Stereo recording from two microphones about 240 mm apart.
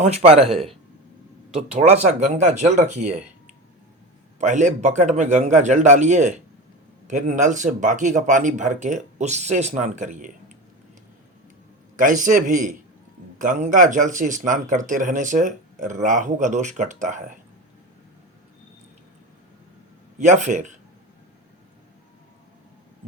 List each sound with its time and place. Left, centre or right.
0.0 s a man's voice: right
1.5 s a man's voice: right
4.4 s a man's voice: right
11.9 s speech: right
20.1 s speech: right